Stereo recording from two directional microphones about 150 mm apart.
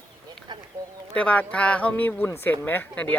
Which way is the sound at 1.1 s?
10° left (ahead or behind).